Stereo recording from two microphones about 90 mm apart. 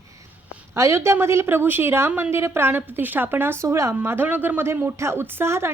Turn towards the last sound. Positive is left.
turn(degrees=-30)  # may be behind; listen again after turning